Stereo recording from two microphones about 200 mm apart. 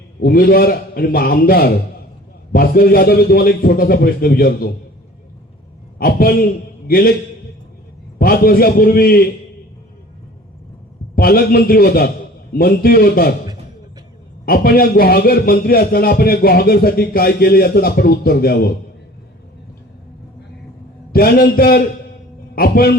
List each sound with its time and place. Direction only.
0.2 s a man's voice: 45° left (ahead or behind)
6.0 s a man's voice: 50° left (ahead or behind)
8.2 s a man's voice: 50° left (ahead or behind)
11.1 s a man's voice: 50° left (ahead or behind)
14.4 s a man's voice: 50° left (ahead or behind)
21.1 s a man's voice: 50° left (ahead or behind)